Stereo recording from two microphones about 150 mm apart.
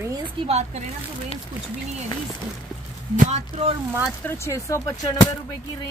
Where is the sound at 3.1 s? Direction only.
60° right (ahead or behind).